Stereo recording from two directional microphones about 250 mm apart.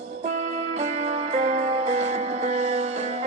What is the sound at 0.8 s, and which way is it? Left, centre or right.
Music, right.